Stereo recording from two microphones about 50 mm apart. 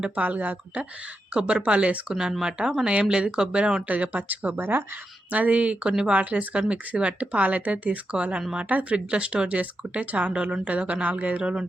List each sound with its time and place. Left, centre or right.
0.0 s speech: right
3.8 s speech: right
5.3 s speech: right